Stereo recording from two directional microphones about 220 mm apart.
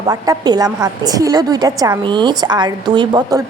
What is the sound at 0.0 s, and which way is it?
A woman's voice, 20° right (ahead or behind).